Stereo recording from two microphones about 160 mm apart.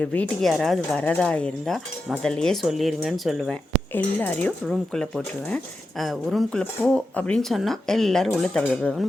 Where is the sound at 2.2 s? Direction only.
5° left (ahead or behind).